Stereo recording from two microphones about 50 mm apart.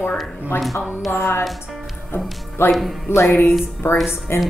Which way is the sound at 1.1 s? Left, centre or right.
Left.